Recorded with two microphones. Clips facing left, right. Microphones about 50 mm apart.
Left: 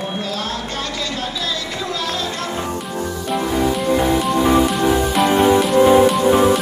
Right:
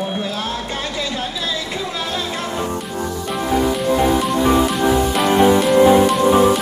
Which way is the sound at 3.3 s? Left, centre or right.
Centre.